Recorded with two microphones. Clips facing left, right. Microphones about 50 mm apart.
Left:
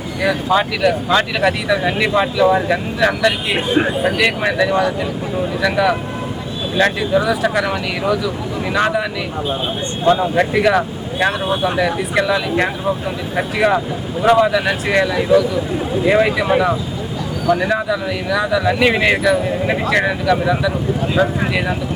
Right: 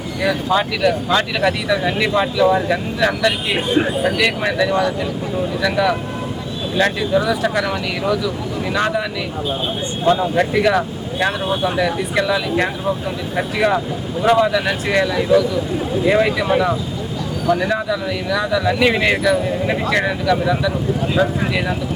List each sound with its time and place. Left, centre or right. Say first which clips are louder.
0.2 s speech: left 2 dB; centre